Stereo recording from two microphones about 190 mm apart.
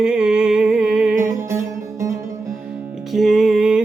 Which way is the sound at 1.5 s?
15° right (ahead or behind).